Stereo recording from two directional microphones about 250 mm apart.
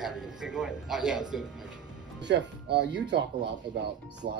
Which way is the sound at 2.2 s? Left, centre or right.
Right.